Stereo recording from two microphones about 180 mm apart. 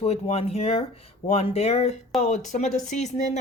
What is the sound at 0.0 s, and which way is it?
Speech, 35° left (ahead or behind).